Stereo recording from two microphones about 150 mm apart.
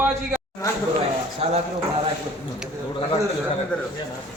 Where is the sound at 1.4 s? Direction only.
40° right (ahead or behind).